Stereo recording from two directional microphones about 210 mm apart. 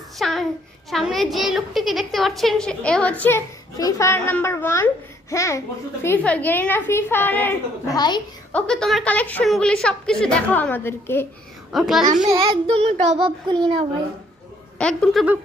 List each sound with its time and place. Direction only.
0.2 s a sound: centre (ahead or behind)
0.9 s a woman's voice: centre (ahead or behind); by 8.2 s 20° left (ahead or behind)
8.5 s a woman's voice: 5° left (ahead or behind)
11.7 s a woman's voice: centre (ahead or behind)
12.0 s a child's voice: 35° right (ahead or behind)
13.1 s a child's voice: 25° right (ahead or behind)
14.8 s a woman's voice: 5° left (ahead or behind)